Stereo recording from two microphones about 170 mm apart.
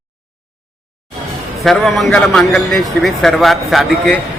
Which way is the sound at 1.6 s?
Centre (ahead or behind).